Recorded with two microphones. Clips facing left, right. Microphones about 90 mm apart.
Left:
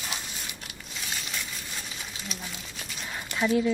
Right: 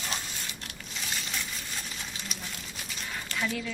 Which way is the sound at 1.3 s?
Centre (ahead or behind).